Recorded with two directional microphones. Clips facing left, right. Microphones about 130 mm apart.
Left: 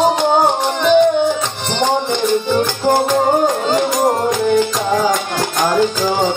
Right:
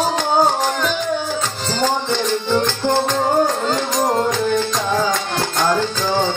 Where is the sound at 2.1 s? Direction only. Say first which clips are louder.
Left 3 dB; 15° left (ahead or behind).